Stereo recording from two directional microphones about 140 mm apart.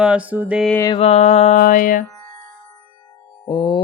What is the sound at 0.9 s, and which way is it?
Music, 50° left (ahead or behind).